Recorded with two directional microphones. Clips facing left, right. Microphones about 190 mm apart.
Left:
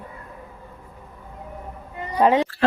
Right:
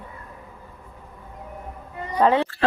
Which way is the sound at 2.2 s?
15° left (ahead or behind).